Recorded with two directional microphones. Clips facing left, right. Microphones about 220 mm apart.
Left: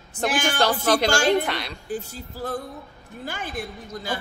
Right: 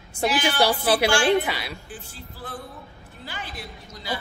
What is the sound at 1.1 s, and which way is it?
Speech, 40° left (ahead or behind).